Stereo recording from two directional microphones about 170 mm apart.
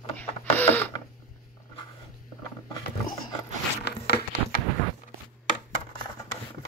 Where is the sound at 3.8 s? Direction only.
70° left (ahead or behind).